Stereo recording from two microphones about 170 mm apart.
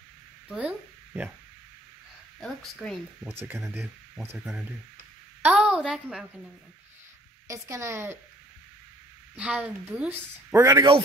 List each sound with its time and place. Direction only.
0.5 s speech: 10° right (ahead or behind)
2.4 s a woman's voice: centre (ahead or behind)
3.3 s a woman's voice: 15° right (ahead or behind)
7.4 s speech: 20° right (ahead or behind)
9.4 s speech: 10° right (ahead or behind); by 11.0 s 25° right (ahead or behind)